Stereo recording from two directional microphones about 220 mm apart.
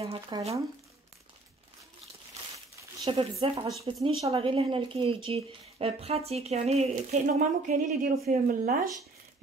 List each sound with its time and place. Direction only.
0.0 s speech: 25° right (ahead or behind)
3.1 s speech: 25° right (ahead or behind)